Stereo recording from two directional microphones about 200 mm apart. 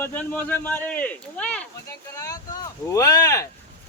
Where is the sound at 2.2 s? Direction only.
15° left (ahead or behind).